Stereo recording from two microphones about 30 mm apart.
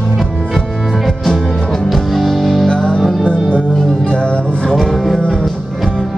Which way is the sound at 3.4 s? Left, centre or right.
Left.